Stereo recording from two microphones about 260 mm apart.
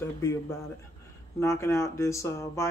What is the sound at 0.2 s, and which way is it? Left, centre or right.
Speech, centre.